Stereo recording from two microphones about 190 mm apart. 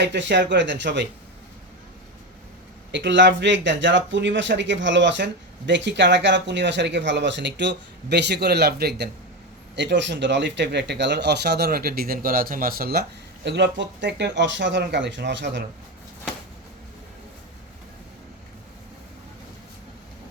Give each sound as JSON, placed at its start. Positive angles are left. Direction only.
{"t": 0.0, "sound": "speech", "side_deg": -65}
{"t": 2.9, "sound": "speech", "side_deg": -70}